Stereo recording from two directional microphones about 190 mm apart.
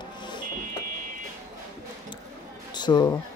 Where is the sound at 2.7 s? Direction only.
25° left (ahead or behind).